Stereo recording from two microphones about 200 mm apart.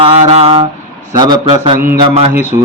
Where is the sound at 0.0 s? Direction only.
30° right (ahead or behind).